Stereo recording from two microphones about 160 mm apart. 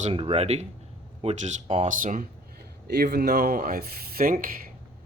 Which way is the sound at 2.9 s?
85° right.